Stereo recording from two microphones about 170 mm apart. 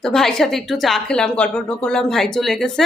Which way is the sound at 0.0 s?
5° left (ahead or behind).